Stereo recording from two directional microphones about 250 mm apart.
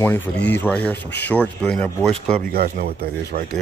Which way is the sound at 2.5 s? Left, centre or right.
Right.